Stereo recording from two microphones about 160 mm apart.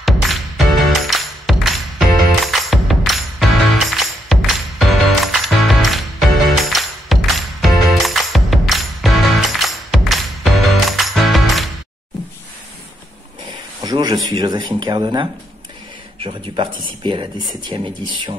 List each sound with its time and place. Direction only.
0.0 s music: centre (ahead or behind)
13.8 s a sound: 25° right (ahead or behind)
14.3 s speech: 25° right (ahead or behind)